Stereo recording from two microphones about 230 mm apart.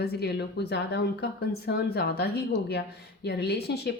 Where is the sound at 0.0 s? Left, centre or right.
Left.